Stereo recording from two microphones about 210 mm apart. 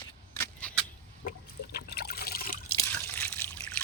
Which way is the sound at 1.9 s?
45° left (ahead or behind).